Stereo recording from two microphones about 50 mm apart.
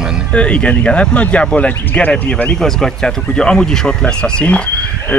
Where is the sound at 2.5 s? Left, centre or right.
Centre.